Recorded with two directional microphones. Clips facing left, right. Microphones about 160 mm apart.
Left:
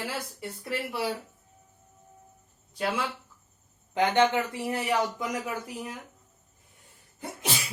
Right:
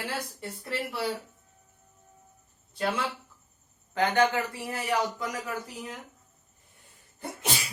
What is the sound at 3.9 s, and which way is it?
A man's voice, 20° left (ahead or behind).